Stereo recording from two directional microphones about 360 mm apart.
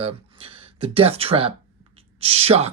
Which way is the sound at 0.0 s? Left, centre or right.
Centre.